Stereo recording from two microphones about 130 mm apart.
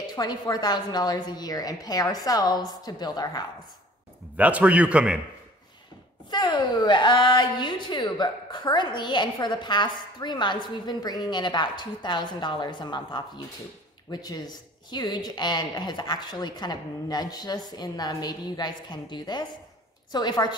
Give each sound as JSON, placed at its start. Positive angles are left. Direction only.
{"t": 0.1, "sound": "speech", "side_deg": 30}
{"t": 4.4, "sound": "a man's voice", "side_deg": -10}
{"t": 6.3, "sound": "speech", "side_deg": 35}